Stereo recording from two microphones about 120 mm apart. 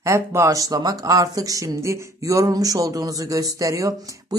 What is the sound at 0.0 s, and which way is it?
Speech, 25° right (ahead or behind).